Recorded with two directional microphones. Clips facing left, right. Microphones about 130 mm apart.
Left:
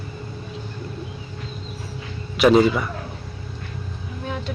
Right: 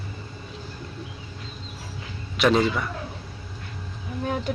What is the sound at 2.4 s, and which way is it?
Speech, 5° left (ahead or behind).